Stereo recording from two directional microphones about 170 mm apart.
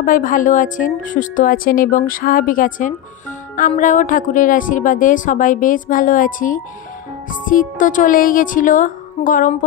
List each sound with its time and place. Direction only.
0.0 s speech: 50° left (ahead or behind)